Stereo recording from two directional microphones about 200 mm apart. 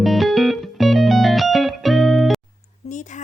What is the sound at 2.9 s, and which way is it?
Speech, 35° left (ahead or behind).